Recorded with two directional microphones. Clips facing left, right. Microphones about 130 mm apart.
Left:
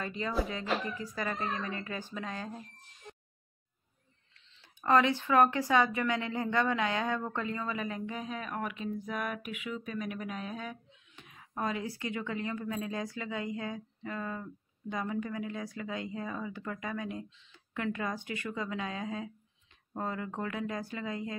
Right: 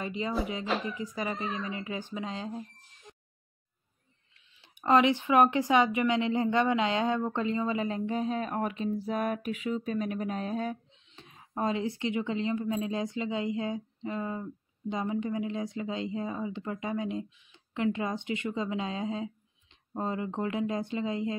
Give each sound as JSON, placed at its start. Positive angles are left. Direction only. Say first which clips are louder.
{"t": 0.0, "sound": "speech", "louder": "right 2 dB", "side_deg": -20}
{"t": 4.6, "sound": "speech", "louder": "right 2 dB", "side_deg": -20}